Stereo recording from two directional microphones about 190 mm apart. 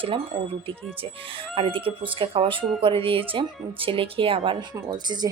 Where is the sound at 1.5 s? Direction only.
25° right (ahead or behind).